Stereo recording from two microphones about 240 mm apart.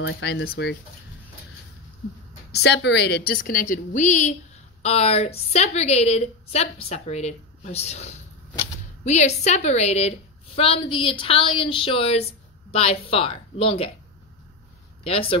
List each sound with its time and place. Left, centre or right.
0.0 s speech: left
2.5 s a woman's voice: left
15.0 s a woman's voice: left